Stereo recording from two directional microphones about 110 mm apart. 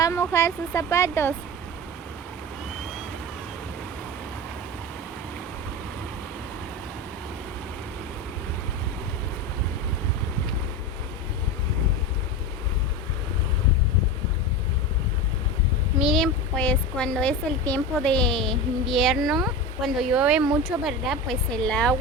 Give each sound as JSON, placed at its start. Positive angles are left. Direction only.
{"t": 0.0, "sound": "speech", "side_deg": 25}
{"t": 16.0, "sound": "speech", "side_deg": 0}